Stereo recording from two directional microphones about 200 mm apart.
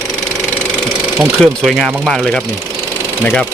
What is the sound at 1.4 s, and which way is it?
Speech, centre (ahead or behind).